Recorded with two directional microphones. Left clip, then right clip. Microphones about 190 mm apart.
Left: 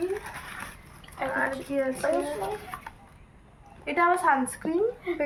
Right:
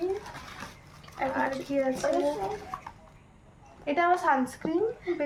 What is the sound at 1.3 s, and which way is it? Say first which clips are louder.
Speech: left 2 dB; 20° right (ahead or behind).